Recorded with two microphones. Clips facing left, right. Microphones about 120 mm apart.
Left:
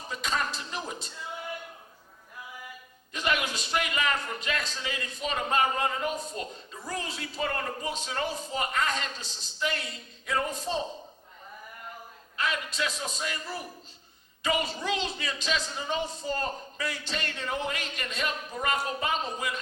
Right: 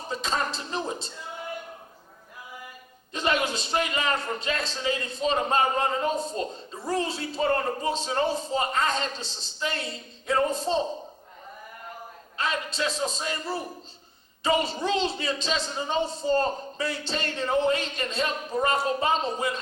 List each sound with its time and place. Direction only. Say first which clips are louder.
0.1 s a sound: right 2 dB; 30° right (ahead or behind)
3.1 s a man's voice: right 4 dB; 30° right (ahead or behind)
12.4 s a man's voice: right 2 dB; 30° right (ahead or behind)